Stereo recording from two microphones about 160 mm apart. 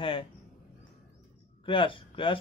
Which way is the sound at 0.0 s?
35° left (ahead or behind).